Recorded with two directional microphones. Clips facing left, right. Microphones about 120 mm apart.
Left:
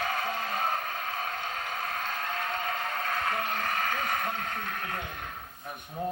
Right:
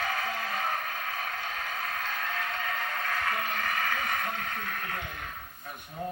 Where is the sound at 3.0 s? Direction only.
25° left (ahead or behind).